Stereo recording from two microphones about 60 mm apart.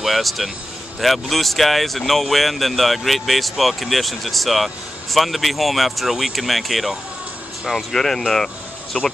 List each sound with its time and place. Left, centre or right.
0.0 s speech: centre